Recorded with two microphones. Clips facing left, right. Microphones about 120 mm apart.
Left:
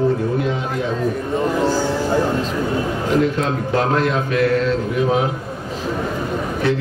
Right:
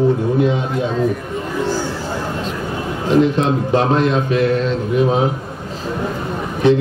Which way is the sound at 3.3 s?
25° right (ahead or behind).